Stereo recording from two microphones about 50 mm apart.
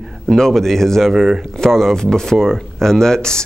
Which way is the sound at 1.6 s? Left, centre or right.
Centre.